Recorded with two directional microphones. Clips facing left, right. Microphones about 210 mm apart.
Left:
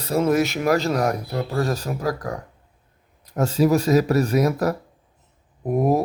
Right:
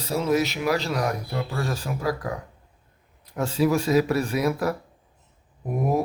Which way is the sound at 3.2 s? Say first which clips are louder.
Left 3 dB; 40° left (ahead or behind).